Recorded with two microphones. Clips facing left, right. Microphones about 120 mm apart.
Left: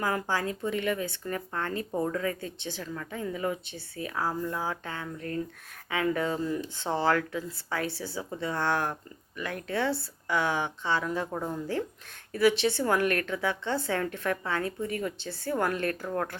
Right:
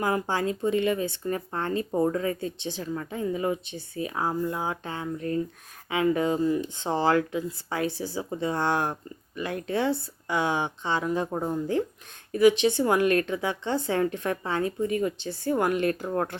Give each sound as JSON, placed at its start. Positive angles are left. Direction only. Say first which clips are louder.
{"t": 0.0, "sound": "speech", "louder": "right 3 dB", "side_deg": -20}